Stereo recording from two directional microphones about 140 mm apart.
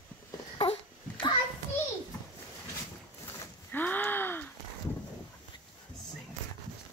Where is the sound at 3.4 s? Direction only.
15° left (ahead or behind).